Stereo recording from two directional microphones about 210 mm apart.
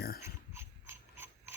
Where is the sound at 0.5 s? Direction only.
10° right (ahead or behind).